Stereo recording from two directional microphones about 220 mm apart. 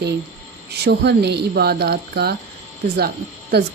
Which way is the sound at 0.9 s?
50° right (ahead or behind).